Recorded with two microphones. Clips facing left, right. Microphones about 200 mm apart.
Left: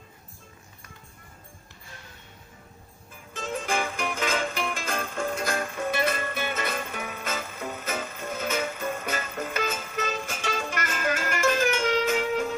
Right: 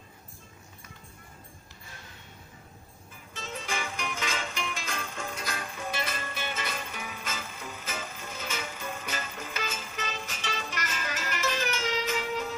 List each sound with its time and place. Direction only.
3.3 s music: 50° left (ahead or behind)